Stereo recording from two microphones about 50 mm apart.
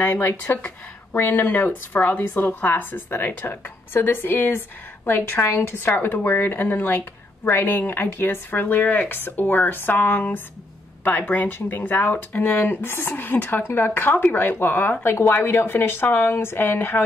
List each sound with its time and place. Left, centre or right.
0.5 s speech: left
3.9 s speech: left
12.3 s speech: left
12.5 s speech: left